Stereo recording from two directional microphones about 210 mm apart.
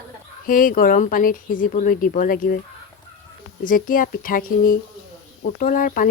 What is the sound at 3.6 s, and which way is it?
Speech, 40° left (ahead or behind).